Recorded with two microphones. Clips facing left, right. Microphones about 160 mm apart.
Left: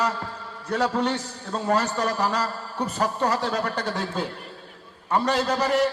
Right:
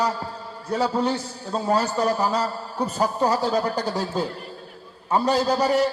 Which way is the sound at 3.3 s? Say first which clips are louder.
Right 3 dB; 30° right (ahead or behind).